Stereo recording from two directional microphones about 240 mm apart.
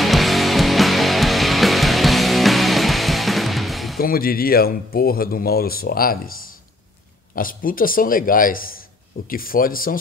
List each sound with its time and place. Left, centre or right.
0.0 s music: centre
4.0 s speech: left